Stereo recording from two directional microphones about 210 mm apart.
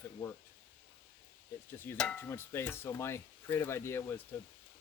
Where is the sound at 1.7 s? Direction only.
10° left (ahead or behind).